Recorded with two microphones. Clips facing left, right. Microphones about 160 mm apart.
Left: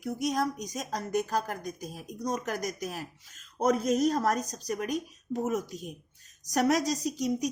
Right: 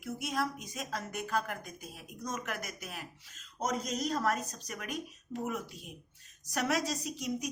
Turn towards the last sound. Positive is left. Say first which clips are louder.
# left 7 dB
turn(degrees=35)  # may be behind; listen again after turning